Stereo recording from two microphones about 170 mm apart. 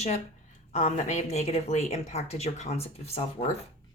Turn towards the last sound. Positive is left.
turn(degrees=35)  # may be behind; listen again after turning